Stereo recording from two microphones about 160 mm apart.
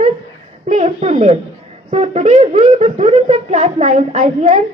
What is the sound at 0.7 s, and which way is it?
A woman's voice, 40° right (ahead or behind).